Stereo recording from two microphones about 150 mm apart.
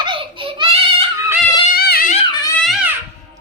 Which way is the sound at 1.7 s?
85° left.